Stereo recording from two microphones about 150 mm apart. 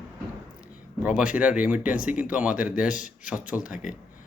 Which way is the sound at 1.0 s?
5° right (ahead or behind).